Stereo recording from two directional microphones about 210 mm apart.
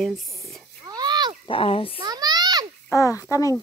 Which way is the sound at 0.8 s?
20° right (ahead or behind).